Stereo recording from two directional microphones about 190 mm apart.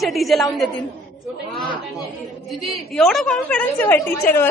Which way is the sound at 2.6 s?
Centre (ahead or behind).